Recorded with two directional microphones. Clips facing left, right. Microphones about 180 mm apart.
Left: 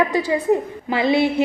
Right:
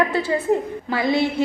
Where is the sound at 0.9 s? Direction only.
20° left (ahead or behind).